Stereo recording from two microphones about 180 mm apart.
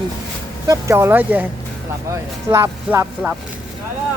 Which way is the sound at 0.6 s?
15° right (ahead or behind).